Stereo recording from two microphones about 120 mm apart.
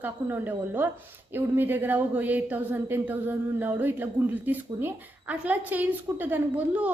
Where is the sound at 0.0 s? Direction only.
15° right (ahead or behind).